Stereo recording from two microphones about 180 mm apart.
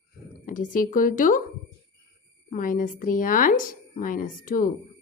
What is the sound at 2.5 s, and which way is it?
Speech, 50° left (ahead or behind).